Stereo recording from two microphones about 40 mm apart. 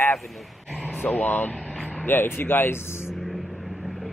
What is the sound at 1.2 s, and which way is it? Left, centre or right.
Speech, left.